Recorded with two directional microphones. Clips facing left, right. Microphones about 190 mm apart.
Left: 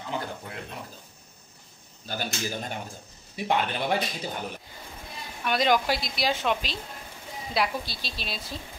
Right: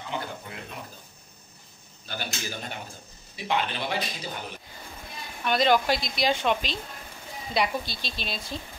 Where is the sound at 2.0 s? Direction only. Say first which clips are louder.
Left 3 dB; 40° left (ahead or behind).